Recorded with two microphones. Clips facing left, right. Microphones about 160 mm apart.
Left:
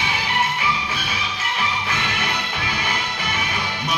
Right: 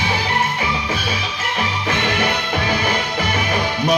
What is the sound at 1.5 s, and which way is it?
Music, 40° right (ahead or behind).